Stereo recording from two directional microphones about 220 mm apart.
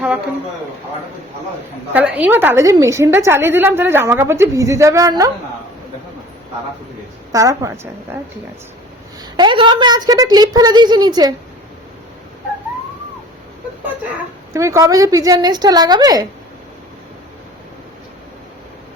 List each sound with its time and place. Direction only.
1.9 s a woman's voice: 5° right (ahead or behind)
7.3 s a woman's voice: 15° right (ahead or behind)
9.3 s a woman's voice: 20° right (ahead or behind)
14.5 s a woman's voice: 15° right (ahead or behind)